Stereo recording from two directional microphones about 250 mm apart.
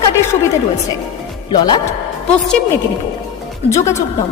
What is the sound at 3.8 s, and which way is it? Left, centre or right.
Speech, centre.